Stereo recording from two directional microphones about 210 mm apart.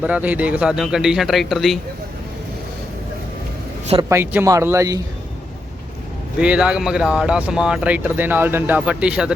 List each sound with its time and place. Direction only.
0.0 s speech: 5° right (ahead or behind)
4.1 s speech: 10° right (ahead or behind)
6.4 s speech: 5° right (ahead or behind)